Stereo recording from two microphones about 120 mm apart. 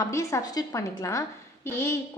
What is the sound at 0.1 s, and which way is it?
A woman's voice, 25° left (ahead or behind).